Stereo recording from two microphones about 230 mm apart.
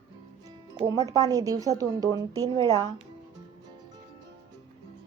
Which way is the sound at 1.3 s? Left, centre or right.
Centre.